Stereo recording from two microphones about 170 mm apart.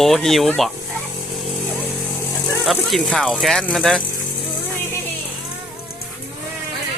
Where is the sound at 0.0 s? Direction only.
Centre (ahead or behind).